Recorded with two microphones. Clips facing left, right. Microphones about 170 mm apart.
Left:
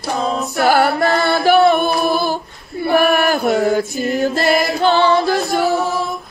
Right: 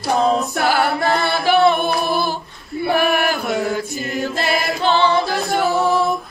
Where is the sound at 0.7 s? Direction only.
50° left (ahead or behind).